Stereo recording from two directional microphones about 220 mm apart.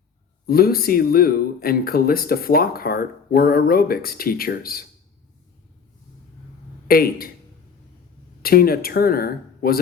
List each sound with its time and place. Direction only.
0.4 s speech: 45° left (ahead or behind)
6.8 s speech: 45° left (ahead or behind)
8.4 s speech: 45° left (ahead or behind)